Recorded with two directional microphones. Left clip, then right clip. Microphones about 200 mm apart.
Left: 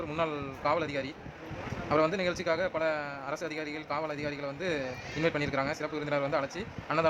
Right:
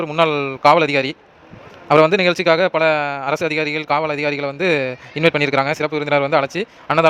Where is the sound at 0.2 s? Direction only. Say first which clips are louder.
Right 17 dB; 45° right (ahead or behind).